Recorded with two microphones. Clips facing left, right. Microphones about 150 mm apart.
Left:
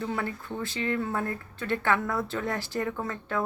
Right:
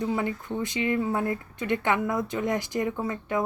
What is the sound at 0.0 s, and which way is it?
A woman's voice, 15° right (ahead or behind).